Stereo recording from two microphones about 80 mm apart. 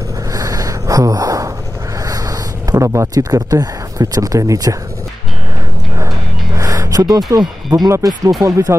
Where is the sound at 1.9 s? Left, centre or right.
Right.